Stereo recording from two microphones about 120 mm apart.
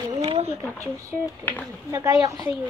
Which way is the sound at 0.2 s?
60° right (ahead or behind).